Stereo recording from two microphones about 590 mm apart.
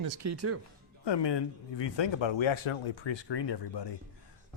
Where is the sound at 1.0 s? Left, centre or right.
Left.